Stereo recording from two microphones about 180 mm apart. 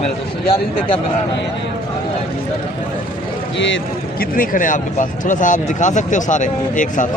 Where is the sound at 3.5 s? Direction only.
90° left.